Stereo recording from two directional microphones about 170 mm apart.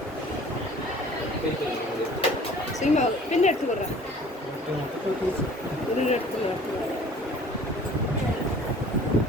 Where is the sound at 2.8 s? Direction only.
45° left (ahead or behind).